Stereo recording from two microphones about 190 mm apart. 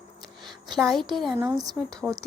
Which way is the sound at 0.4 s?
Centre (ahead or behind).